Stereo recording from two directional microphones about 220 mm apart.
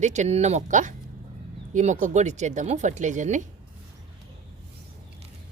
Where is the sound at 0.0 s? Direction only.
30° right (ahead or behind).